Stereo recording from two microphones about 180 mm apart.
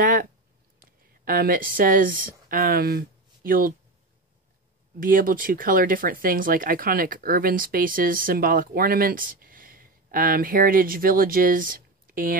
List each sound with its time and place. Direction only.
0.0 s speech: 50° right (ahead or behind)
5.0 s speech: 50° right (ahead or behind)